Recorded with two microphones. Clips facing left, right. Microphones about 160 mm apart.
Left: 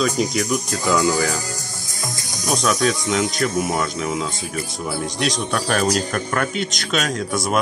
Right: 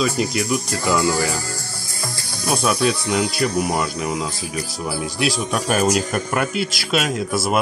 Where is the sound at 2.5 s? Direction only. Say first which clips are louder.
Even; 5° right (ahead or behind).